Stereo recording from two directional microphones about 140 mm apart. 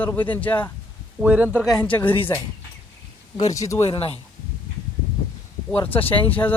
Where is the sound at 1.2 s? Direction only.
10° right (ahead or behind).